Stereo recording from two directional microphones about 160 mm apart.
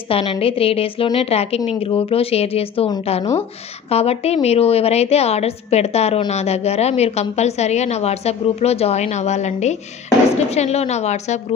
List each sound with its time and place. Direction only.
0.1 s a woman's voice: 35° left (ahead or behind)
3.9 s a woman's voice: 40° left (ahead or behind)